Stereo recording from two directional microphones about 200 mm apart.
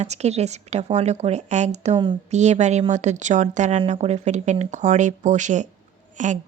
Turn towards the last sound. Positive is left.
turn(degrees=-40)  # may be behind; listen again after turning